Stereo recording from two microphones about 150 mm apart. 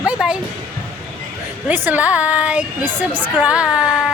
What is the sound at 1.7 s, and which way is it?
Speech, 10° right (ahead or behind).